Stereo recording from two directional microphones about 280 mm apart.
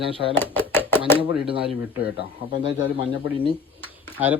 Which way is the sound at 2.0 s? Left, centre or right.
Left.